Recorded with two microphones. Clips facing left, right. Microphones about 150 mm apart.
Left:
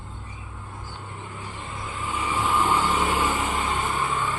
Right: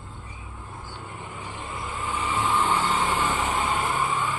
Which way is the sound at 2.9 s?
10° left (ahead or behind).